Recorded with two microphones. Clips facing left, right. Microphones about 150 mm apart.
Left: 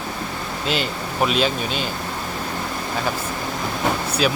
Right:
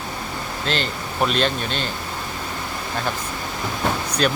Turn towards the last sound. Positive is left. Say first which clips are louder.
# even
turn(degrees=5)  # may be behind; listen again after turning